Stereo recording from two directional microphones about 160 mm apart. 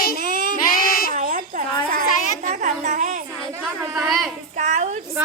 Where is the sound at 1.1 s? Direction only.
60° right (ahead or behind).